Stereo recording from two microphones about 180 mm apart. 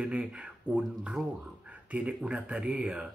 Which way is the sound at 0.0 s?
5° right (ahead or behind).